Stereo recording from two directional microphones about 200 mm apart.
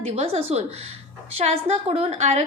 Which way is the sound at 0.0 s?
30° right (ahead or behind).